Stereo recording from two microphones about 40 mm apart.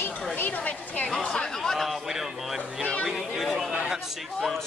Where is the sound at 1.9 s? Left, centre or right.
Centre.